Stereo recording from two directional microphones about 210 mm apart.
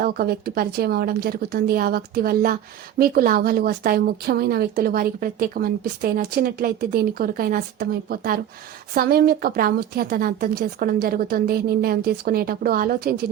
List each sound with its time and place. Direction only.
0.0 s a woman's voice: 45° right (ahead or behind)